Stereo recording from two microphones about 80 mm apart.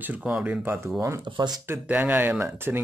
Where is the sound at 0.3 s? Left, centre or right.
Centre.